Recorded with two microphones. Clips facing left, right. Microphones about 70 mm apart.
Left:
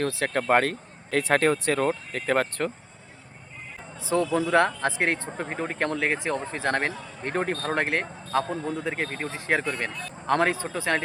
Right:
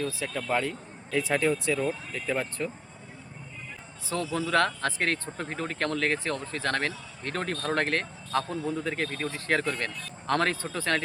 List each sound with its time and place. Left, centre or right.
0.0 s speech: left
4.1 s speech: left
4.5 s a man's voice: centre
9.0 s speech: left
9.5 s speech: centre